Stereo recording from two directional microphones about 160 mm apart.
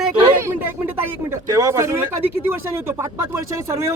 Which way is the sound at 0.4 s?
15° right (ahead or behind).